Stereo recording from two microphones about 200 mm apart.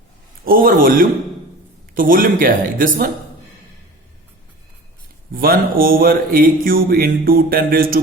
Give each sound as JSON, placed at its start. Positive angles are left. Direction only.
{"t": 0.4, "sound": "speech", "side_deg": -45}
{"t": 5.3, "sound": "speech", "side_deg": -45}